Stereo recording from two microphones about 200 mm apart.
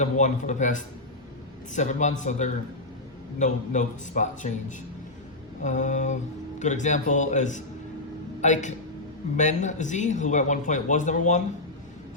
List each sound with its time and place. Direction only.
0.0 s speech: 35° left (ahead or behind)
5.6 s speech: 35° left (ahead or behind)